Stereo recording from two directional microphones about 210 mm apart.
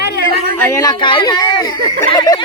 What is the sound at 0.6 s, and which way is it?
Speech, 10° left (ahead or behind).